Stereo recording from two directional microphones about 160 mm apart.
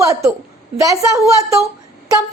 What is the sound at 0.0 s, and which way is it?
A woman's voice, 20° right (ahead or behind).